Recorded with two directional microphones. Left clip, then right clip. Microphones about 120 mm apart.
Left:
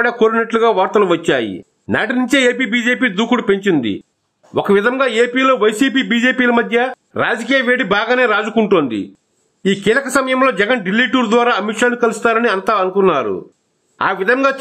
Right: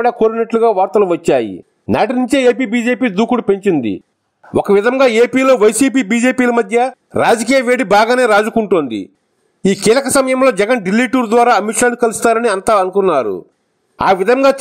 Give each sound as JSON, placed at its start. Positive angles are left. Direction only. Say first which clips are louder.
{"t": 0.5, "sound": "speech", "louder": "right 1 dB", "side_deg": -40}